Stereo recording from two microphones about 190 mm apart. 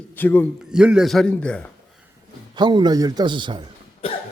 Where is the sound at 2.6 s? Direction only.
25° right (ahead or behind).